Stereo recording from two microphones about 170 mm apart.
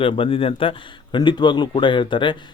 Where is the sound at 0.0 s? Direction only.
30° left (ahead or behind).